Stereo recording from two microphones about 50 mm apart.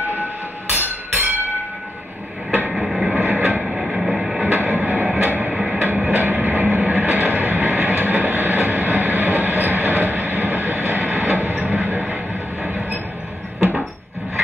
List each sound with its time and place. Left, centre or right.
0.1 s train: right
2.7 s vehicle: centre
3.2 s vehicle: right
3.6 s music: centre
4.6 s music: right